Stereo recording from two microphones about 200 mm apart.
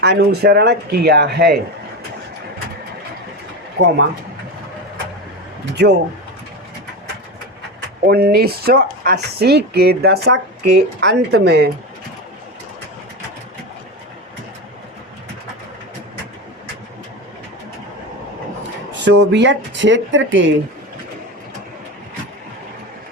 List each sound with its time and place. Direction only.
0.0 s speech: 55° right (ahead or behind)
5.8 s speech: 60° right (ahead or behind)
8.0 s speech: 50° right (ahead or behind)
18.9 s speech: 60° right (ahead or behind)